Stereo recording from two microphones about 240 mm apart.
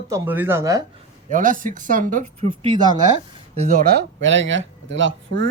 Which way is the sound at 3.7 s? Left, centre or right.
Right.